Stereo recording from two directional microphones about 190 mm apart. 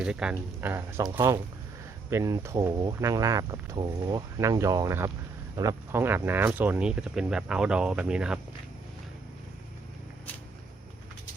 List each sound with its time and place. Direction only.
0.0 s speech: 5° right (ahead or behind)